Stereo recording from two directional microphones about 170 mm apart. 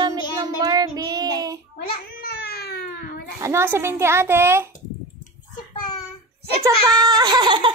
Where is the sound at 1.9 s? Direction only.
65° left (ahead or behind).